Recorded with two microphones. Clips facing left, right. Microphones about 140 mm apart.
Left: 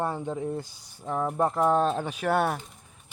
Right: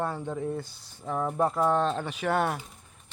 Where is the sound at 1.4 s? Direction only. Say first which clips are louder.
Left 2 dB; 15° left (ahead or behind).